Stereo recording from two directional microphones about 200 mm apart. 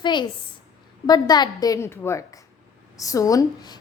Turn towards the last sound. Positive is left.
turn(degrees=20)  # may be behind; listen again after turning